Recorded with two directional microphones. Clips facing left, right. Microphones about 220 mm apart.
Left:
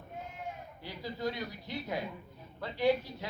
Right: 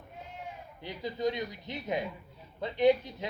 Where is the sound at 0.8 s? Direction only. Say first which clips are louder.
Right 5 dB; 20° right (ahead or behind).